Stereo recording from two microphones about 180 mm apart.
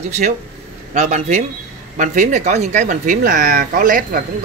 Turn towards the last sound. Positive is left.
turn(degrees=-50)  # may be behind; listen again after turning